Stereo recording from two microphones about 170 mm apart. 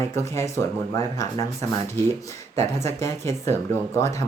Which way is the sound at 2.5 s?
15° left (ahead or behind).